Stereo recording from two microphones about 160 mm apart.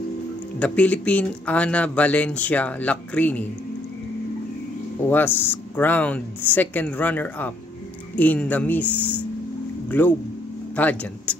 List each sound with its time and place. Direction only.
0.6 s speech: 10° left (ahead or behind)
5.1 s speech: 15° left (ahead or behind)